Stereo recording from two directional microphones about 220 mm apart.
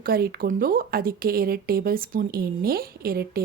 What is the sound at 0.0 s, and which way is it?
Speech, 45° right (ahead or behind).